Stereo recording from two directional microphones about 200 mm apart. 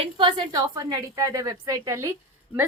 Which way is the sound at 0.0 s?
25° right (ahead or behind).